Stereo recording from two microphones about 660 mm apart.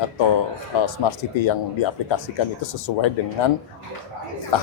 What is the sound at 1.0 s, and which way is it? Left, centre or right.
Speech, left.